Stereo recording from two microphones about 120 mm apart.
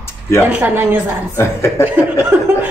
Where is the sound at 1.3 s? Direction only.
20° left (ahead or behind).